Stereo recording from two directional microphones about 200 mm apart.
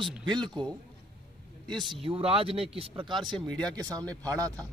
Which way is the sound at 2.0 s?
30° right (ahead or behind).